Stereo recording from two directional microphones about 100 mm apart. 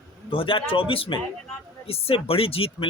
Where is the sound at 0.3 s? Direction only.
60° left (ahead or behind).